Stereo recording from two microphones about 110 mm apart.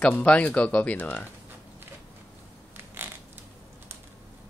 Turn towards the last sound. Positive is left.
turn(degrees=-20)  # may be behind; listen again after turning